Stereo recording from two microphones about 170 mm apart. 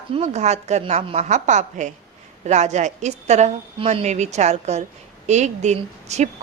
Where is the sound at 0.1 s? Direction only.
40° right (ahead or behind).